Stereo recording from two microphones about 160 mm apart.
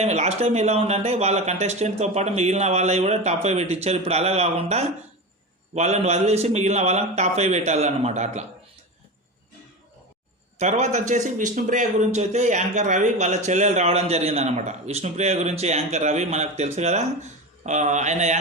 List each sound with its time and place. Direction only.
0.0 s a man's voice: 45° right (ahead or behind)
10.6 s a man's voice: 45° right (ahead or behind)